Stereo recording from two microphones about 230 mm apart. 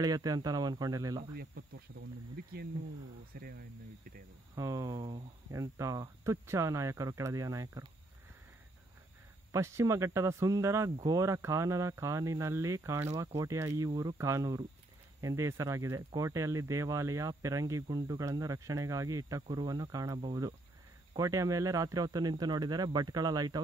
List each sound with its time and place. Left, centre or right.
0.0 s speech: centre
1.3 s speech: right
3.3 s speech: right
4.6 s speech: centre
9.5 s speech: centre